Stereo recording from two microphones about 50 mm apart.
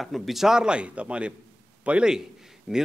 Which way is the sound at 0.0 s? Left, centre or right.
Centre.